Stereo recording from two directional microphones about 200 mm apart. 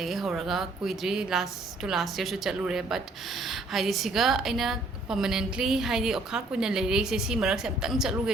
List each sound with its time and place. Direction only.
0.0 s a woman's voice: centre (ahead or behind)